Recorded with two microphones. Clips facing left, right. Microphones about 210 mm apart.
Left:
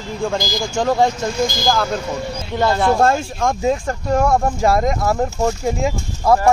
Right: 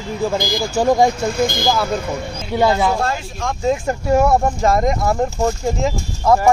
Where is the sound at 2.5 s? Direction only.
10° right (ahead or behind).